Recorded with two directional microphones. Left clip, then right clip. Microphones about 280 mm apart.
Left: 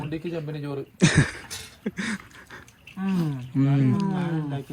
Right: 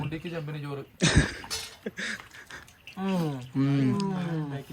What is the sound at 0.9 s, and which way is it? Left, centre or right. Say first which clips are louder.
Speech: left 3 dB; centre.